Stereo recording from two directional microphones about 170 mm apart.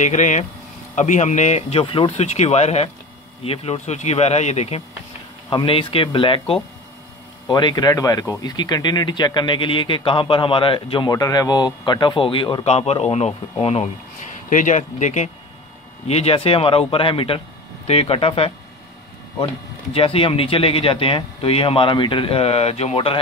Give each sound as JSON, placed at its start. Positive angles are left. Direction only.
{"t": 0.0, "sound": "speech", "side_deg": 45}